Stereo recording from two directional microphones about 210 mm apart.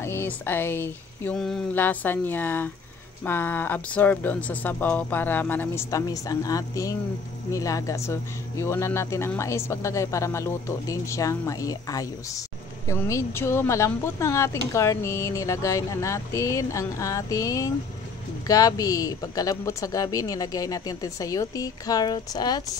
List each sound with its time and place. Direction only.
0.0 s speech: 10° left (ahead or behind)